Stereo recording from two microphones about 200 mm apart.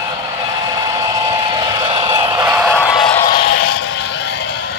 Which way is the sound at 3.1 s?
20° left (ahead or behind).